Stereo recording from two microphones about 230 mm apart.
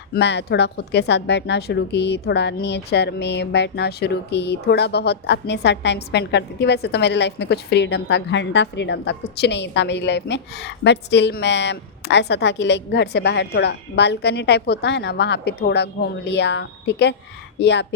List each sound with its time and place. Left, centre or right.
0.1 s speech: left